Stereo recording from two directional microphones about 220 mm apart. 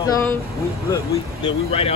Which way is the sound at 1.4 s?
25° left (ahead or behind).